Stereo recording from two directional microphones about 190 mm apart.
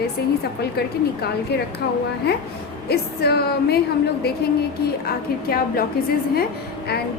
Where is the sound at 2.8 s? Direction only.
60° left (ahead or behind).